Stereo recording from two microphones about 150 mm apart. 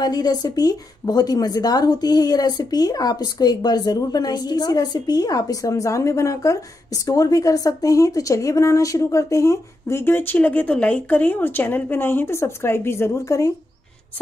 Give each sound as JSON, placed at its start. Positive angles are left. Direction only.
{"t": 0.0, "sound": "a woman's voice", "side_deg": 25}